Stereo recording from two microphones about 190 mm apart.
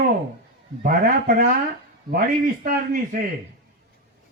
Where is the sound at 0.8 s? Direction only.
45° right (ahead or behind).